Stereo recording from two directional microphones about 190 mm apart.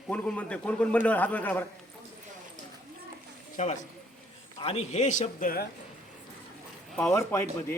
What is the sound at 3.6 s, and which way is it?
A man's voice, 35° left (ahead or behind).